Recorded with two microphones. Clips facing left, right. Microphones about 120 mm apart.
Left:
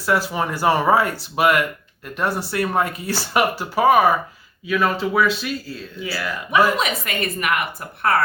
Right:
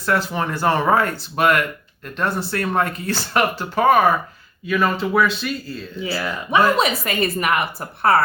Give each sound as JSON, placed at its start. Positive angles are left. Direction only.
{"t": 0.0, "sound": "speech", "side_deg": 10}
{"t": 6.0, "sound": "a woman's voice", "side_deg": -25}